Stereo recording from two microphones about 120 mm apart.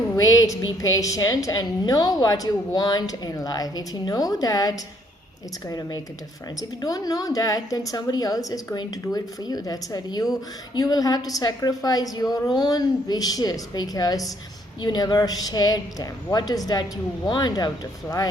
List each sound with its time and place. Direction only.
0.2 s a woman's voice: 30° left (ahead or behind)